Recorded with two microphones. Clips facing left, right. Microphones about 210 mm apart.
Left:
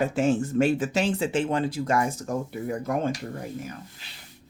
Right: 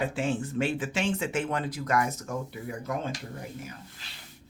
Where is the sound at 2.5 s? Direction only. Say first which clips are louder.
Left 6 dB; 45° left (ahead or behind).